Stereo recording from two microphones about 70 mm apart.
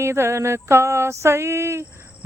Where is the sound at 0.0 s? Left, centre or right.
Right.